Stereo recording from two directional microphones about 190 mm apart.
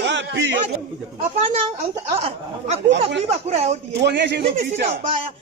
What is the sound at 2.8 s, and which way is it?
Speech, 70° right (ahead or behind).